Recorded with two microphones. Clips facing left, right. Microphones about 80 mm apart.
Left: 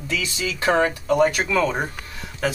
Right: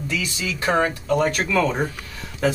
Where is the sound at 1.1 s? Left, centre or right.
Centre.